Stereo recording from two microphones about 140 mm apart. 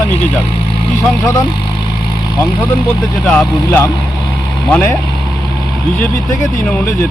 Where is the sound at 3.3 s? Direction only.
10° left (ahead or behind).